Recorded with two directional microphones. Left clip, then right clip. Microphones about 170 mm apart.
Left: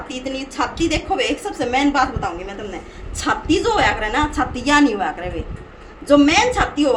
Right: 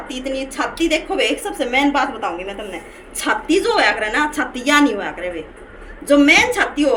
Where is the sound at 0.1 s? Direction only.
25° left (ahead or behind).